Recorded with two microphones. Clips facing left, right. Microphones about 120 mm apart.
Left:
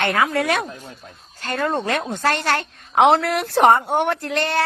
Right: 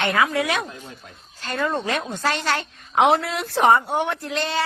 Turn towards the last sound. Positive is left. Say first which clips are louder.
# left 4 dB
turn(degrees=60)  # may be behind; listen again after turning